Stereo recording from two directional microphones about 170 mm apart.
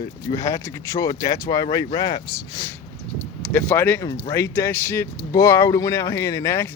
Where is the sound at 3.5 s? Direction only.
10° left (ahead or behind).